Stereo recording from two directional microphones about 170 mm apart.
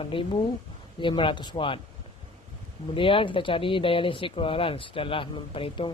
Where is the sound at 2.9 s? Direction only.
30° left (ahead or behind).